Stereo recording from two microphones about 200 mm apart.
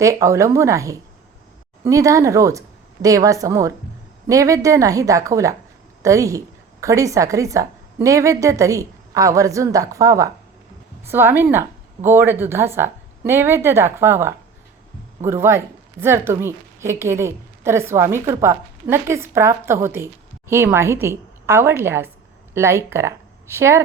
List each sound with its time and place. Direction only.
0.0 s a woman's voice: 15° right (ahead or behind)